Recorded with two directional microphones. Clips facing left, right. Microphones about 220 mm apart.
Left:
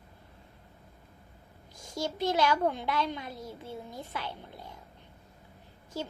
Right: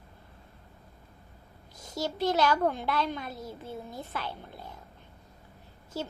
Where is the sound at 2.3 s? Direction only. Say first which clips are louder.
Right 1 dB; 10° left (ahead or behind).